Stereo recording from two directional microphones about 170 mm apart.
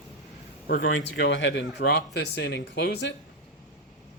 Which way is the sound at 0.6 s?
60° left (ahead or behind).